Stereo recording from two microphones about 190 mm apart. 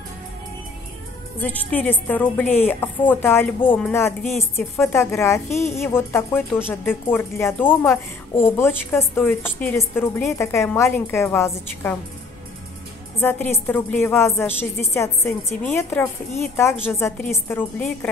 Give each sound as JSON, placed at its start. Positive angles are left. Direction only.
{"t": 1.4, "sound": "speech", "side_deg": 10}
{"t": 13.2, "sound": "speech", "side_deg": 10}